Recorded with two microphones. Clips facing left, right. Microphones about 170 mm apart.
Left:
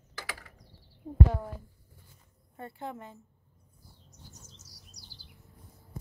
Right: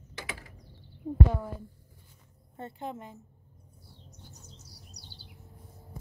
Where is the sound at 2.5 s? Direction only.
20° right (ahead or behind).